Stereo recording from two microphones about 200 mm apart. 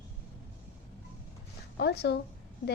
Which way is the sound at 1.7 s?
55° left (ahead or behind).